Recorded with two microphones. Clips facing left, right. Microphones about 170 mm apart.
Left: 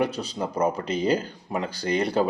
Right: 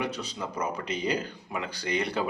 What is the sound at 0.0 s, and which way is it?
Speech, 35° left (ahead or behind).